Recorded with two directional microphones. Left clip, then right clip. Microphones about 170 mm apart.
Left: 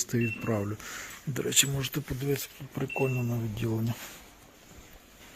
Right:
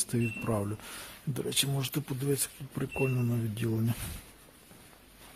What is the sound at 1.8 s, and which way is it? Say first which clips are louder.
Speech: left 1 dB; 15° right (ahead or behind).